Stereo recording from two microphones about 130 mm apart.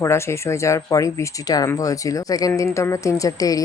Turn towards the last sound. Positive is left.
turn(degrees=30)  # may be behind; listen again after turning